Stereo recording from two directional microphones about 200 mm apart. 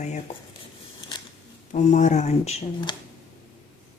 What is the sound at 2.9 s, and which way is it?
Speech, 20° left (ahead or behind).